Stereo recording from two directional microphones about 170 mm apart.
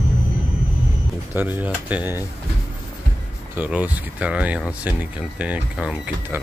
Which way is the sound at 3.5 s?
10° right (ahead or behind).